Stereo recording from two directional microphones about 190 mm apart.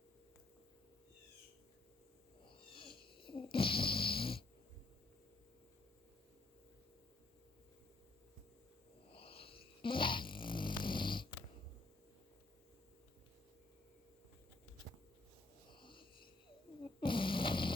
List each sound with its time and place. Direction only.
2.5 s snoring: 25° left (ahead or behind)
9.1 s snoring: 30° left (ahead or behind)
15.7 s snoring: 25° left (ahead or behind)
16.8 s a sound: 25° left (ahead or behind)